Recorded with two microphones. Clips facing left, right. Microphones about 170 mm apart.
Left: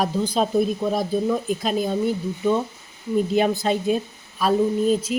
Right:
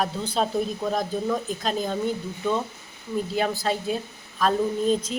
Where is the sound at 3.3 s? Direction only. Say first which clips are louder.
Left 3 dB; 20° left (ahead or behind).